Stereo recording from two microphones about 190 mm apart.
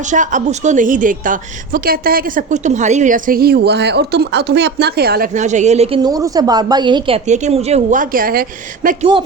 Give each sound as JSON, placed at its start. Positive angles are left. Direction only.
{"t": 0.0, "sound": "a woman's voice", "side_deg": -40}
{"t": 5.3, "sound": "a woman's voice", "side_deg": -40}
{"t": 6.0, "sound": "a woman's voice", "side_deg": -20}